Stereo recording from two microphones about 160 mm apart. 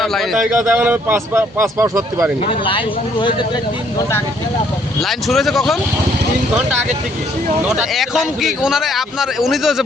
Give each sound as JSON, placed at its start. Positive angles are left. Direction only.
{"t": 0.0, "sound": "speech", "side_deg": 0}
{"t": 0.6, "sound": "speech", "side_deg": -10}
{"t": 2.5, "sound": "speech", "side_deg": 30}
{"t": 5.0, "sound": "speech", "side_deg": 0}
{"t": 7.7, "sound": "speech", "side_deg": -5}